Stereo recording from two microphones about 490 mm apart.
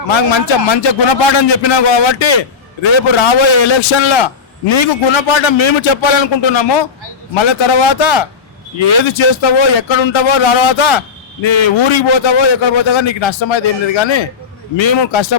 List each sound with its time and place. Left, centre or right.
0.1 s a man's voice: left